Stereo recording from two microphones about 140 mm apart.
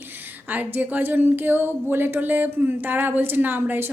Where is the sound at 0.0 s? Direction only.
15° right (ahead or behind).